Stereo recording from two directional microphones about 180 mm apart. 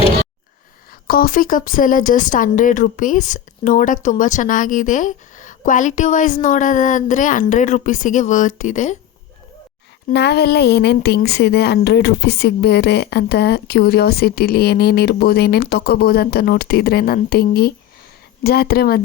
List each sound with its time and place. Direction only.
0.9 s a woman's voice: 55° left (ahead or behind)
10.1 s speech: 70° left (ahead or behind)